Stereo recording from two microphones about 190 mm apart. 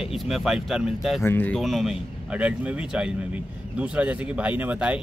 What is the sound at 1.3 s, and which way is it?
Speech, 10° left (ahead or behind).